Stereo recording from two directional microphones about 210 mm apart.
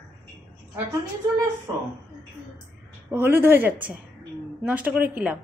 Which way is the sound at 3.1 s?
10° right (ahead or behind).